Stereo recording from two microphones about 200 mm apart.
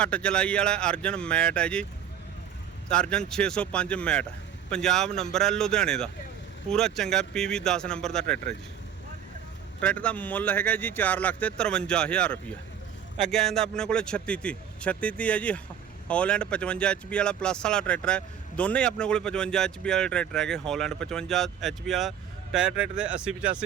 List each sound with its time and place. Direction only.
0.0 s speech: 5° left (ahead or behind)
2.9 s speech: 5° left (ahead or behind)
9.8 s speech: 5° left (ahead or behind)